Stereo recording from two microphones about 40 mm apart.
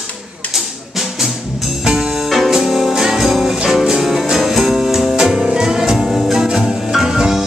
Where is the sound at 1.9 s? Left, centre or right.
Centre.